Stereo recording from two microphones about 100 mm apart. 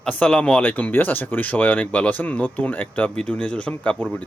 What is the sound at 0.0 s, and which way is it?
Speech, 10° left (ahead or behind).